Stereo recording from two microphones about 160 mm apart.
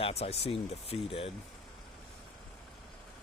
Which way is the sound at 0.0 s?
40° left (ahead or behind).